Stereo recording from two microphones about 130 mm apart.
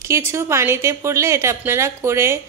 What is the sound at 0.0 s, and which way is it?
A woman's voice, 20° right (ahead or behind).